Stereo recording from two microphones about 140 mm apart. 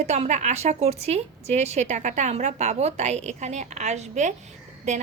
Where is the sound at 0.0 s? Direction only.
50° right (ahead or behind).